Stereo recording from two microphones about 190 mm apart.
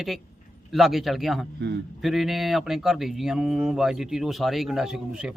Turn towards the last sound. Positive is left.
turn(degrees=-5)  # may be behind; listen again after turning